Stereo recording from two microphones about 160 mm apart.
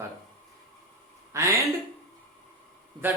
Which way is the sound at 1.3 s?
20° right (ahead or behind).